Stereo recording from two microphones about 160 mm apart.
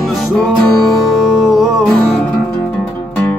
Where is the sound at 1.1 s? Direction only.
Centre (ahead or behind).